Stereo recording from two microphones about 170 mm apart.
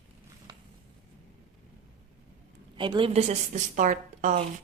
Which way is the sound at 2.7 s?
30° right (ahead or behind).